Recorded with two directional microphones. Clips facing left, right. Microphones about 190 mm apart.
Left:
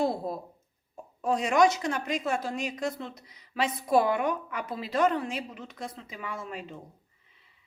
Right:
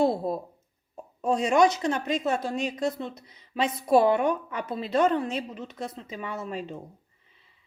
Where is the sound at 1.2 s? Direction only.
25° right (ahead or behind).